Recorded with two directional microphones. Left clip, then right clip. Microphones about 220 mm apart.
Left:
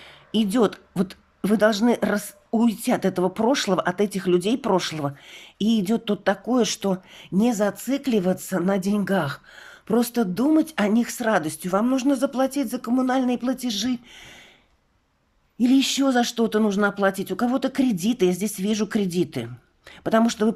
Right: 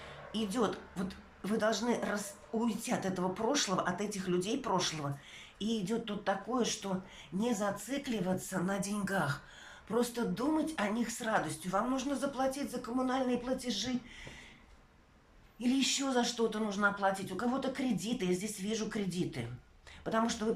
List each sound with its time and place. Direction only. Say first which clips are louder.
0.3 s speech: left 12 dB; 45° left (ahead or behind)
15.5 s speech: left 12 dB; 50° left (ahead or behind)